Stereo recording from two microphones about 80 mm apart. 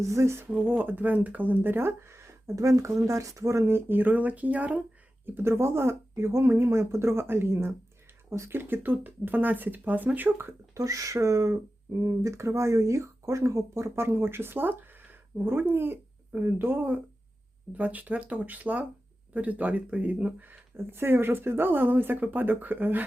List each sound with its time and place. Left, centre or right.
0.0 s speech: right
0.7 s speech: right
10.8 s speech: right